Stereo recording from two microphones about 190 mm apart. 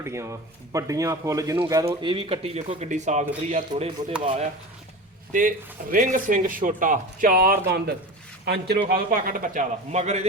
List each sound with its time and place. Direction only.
0.0 s speech: 15° right (ahead or behind)
5.3 s a man's voice: 45° right (ahead or behind)
8.9 s speech: 50° right (ahead or behind)